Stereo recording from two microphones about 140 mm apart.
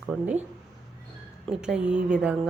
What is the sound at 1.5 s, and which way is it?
Speech, 5° right (ahead or behind).